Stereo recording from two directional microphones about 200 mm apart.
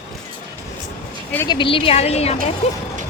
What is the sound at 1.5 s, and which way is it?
Speech, 25° left (ahead or behind).